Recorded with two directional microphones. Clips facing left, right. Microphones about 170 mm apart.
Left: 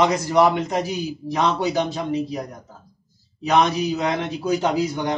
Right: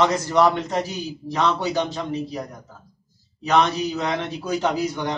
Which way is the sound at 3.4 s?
10° left (ahead or behind).